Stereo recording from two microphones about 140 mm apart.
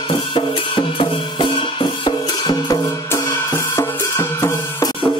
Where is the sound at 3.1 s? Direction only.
20° left (ahead or behind).